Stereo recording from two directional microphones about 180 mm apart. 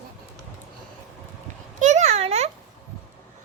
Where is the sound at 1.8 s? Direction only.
40° right (ahead or behind).